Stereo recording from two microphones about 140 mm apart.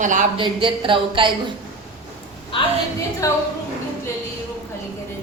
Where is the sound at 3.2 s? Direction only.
25° left (ahead or behind).